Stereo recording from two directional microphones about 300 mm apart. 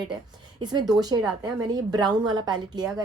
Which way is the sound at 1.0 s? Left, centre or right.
Centre.